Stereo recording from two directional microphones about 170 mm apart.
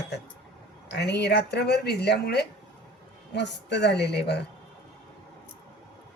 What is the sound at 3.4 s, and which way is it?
A woman's voice, 85° left.